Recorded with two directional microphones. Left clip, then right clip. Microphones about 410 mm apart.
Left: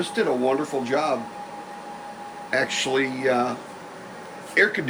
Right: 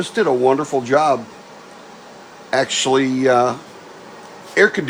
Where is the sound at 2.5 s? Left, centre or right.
Centre.